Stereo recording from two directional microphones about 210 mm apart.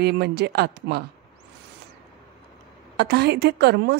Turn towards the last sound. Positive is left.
turn(degrees=-50)  # may be behind; listen again after turning